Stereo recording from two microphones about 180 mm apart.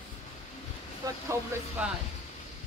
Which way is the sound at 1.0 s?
20° right (ahead or behind).